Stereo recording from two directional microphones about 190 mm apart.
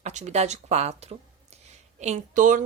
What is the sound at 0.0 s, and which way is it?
Speech, 35° right (ahead or behind).